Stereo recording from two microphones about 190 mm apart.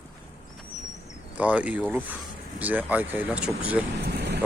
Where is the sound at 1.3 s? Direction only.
5° right (ahead or behind).